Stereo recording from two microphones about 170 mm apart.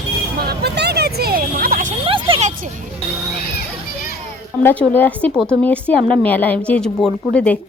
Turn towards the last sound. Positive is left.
turn(degrees=5)  # may be behind; listen again after turning